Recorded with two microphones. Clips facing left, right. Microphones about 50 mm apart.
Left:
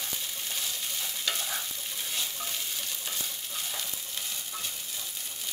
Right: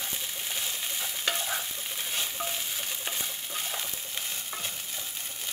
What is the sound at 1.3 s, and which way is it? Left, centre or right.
Stir, right.